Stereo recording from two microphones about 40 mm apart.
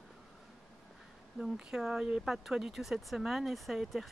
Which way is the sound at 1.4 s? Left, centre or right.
Centre.